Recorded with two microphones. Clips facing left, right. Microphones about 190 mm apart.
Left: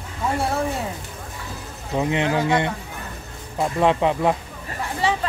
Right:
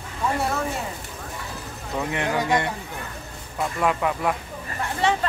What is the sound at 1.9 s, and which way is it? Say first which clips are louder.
Speech: left 4 dB; 20° left (ahead or behind).